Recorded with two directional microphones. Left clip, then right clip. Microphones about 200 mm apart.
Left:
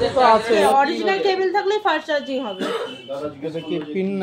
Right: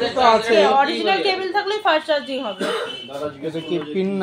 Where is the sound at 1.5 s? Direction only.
40° left (ahead or behind).